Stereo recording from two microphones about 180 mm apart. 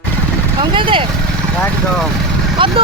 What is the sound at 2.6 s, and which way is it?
Speech, 30° right (ahead or behind).